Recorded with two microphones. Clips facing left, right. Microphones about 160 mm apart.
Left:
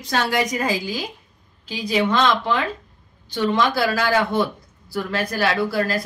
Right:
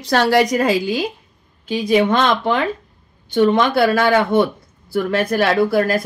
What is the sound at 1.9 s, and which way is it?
A woman's voice, 50° right (ahead or behind).